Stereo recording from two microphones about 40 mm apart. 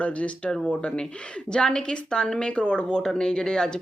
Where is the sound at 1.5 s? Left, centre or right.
Left.